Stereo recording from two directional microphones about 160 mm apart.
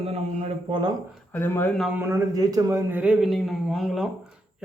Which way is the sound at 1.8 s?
10° right (ahead or behind).